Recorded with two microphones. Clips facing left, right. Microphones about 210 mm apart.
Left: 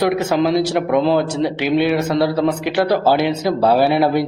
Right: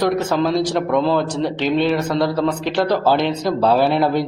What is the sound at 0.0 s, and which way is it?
A man's voice, 10° left (ahead or behind).